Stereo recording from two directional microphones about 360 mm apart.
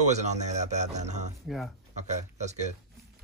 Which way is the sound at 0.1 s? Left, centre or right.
Centre.